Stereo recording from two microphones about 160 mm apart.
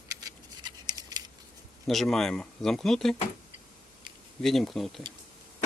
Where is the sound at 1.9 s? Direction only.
Centre (ahead or behind).